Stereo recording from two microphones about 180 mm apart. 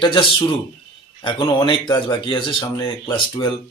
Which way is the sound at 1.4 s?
25° left (ahead or behind).